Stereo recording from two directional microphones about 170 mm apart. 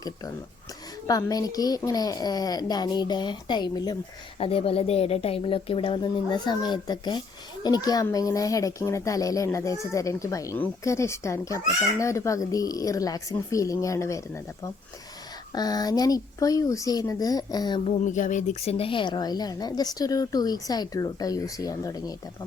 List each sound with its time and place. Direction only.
1.0 s speech: 20° left (ahead or behind)
17.8 s speech: 45° left (ahead or behind); by 22.1 s 20° left (ahead or behind)